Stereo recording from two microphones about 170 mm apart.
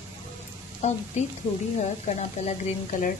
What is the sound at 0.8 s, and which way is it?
A woman's voice, 40° left (ahead or behind).